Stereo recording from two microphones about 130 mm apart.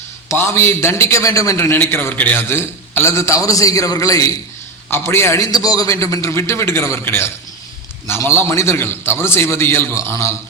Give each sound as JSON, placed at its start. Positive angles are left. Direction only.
{"t": 0.3, "sound": "a man's voice", "side_deg": 20}
{"t": 5.5, "sound": "a man's voice", "side_deg": 30}